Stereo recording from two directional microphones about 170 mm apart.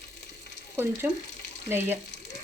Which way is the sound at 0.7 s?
15° right (ahead or behind).